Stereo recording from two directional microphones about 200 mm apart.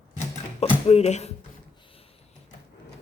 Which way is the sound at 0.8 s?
30° left (ahead or behind).